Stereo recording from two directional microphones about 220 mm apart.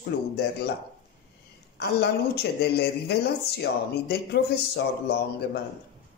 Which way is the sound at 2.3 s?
50° left (ahead or behind).